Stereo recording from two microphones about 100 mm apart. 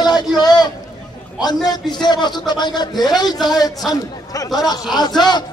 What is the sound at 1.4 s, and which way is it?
A man's voice, 40° left (ahead or behind).